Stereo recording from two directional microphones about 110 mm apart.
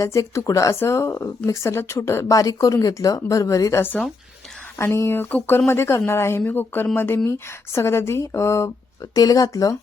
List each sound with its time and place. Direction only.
0.0 s speech: 30° left (ahead or behind)